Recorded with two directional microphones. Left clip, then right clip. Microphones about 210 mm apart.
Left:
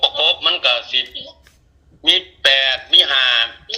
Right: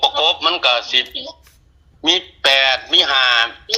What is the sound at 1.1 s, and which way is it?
Speech, 35° right (ahead or behind).